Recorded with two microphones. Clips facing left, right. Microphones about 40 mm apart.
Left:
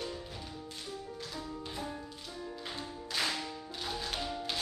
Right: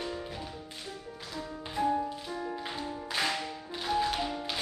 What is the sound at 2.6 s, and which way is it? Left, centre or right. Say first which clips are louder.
Music: right 5 dB; centre.